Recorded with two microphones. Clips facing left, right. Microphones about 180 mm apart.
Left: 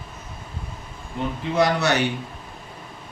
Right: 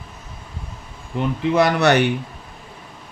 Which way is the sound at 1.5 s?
65° right (ahead or behind).